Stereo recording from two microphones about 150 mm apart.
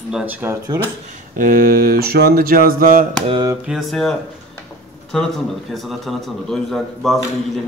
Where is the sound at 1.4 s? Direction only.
75° right (ahead or behind).